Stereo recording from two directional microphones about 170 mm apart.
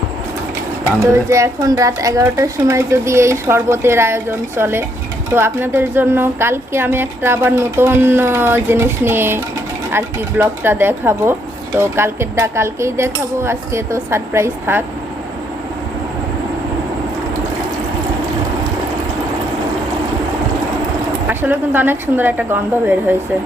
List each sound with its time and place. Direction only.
1.1 s a woman's voice: 20° right (ahead or behind)
21.2 s a woman's voice: 10° right (ahead or behind)